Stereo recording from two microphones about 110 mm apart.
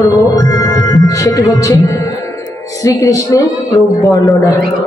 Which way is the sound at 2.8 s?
30° left (ahead or behind).